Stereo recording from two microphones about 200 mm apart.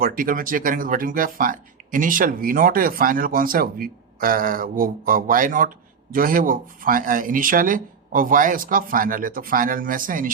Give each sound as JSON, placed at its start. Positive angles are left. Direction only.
{"t": 0.0, "sound": "speech", "side_deg": -45}